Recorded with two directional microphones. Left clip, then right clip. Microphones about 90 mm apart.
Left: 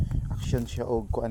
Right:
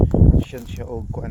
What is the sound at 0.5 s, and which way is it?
Speech, 85° left.